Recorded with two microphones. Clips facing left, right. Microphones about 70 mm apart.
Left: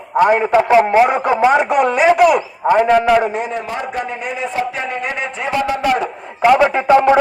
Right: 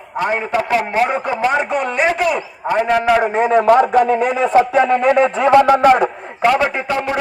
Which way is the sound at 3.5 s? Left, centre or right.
Right.